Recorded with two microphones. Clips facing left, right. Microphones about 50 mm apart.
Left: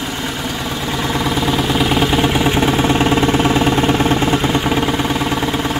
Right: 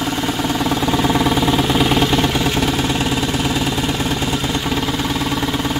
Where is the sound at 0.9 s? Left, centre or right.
Centre.